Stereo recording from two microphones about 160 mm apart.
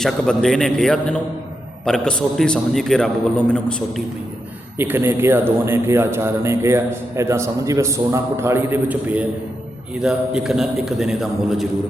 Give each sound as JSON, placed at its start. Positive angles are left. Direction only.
{"t": 0.0, "sound": "a man's voice", "side_deg": 5}
{"t": 4.8, "sound": "a man's voice", "side_deg": -15}